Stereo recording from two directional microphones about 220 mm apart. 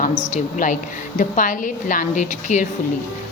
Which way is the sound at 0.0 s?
30° left (ahead or behind).